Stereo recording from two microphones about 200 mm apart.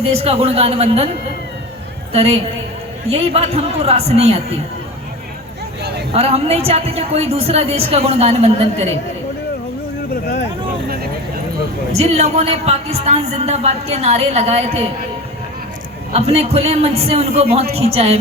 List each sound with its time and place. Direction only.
0.0 s speech: 30° right (ahead or behind)
2.1 s speech: 30° right (ahead or behind)
6.1 s speech: 30° right (ahead or behind)
11.9 s speech: 30° right (ahead or behind)
16.1 s speech: 30° right (ahead or behind)